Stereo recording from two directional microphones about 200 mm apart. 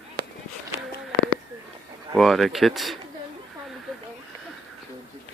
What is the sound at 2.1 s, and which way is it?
Speech, centre (ahead or behind).